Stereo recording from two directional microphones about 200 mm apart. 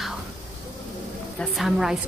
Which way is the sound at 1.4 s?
Centre (ahead or behind).